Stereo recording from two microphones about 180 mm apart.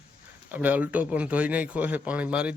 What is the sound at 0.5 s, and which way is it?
A man's voice, 10° right (ahead or behind).